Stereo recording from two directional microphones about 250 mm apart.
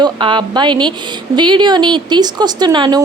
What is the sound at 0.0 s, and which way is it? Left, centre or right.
A woman's voice, centre.